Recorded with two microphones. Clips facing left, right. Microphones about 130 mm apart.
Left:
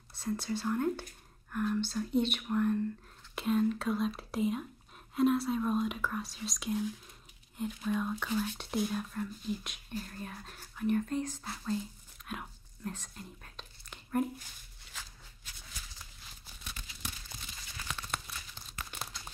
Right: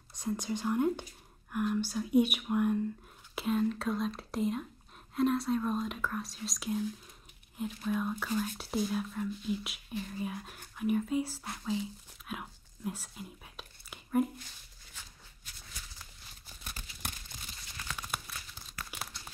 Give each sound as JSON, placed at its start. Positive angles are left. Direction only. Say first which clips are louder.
{"t": 0.1, "sound": "speech", "louder": "even", "side_deg": -15}
{"t": 3.3, "sound": "speech", "louder": "left 1 dB", "side_deg": 0}
{"t": 12.3, "sound": "whispering", "louder": "even", "side_deg": -5}
{"t": 14.9, "sound": "walk", "louder": "left 5 dB", "side_deg": 90}
{"t": 17.9, "sound": "crumpling", "louder": "even", "side_deg": -5}